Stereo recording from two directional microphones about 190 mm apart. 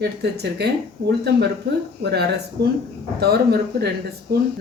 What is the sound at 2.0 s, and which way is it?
A woman's voice, 60° right (ahead or behind).